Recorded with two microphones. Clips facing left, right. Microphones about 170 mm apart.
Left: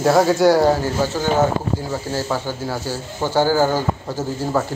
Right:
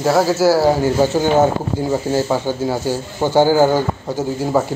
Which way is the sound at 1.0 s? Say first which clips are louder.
Right 5 dB; 20° right (ahead or behind).